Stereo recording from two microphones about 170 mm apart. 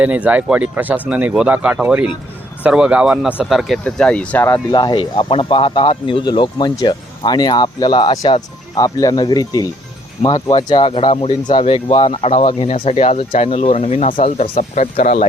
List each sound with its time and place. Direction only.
0.0 s speech: 10° right (ahead or behind); by 4.6 s 10° left (ahead or behind)
4.7 s speech: 25° left (ahead or behind); by 15.3 s 45° left (ahead or behind)